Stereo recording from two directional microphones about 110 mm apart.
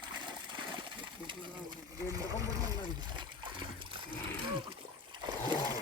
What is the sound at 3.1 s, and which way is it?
Splash, 50° right (ahead or behind).